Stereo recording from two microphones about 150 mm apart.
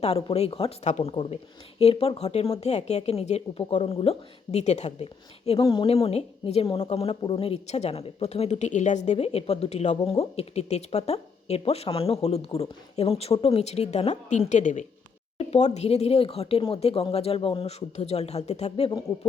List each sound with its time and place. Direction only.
0.0 s speech: 45° left (ahead or behind)
5.5 s speech: 35° left (ahead or behind); by 14.8 s 55° left (ahead or behind)
15.4 s speech: 45° left (ahead or behind)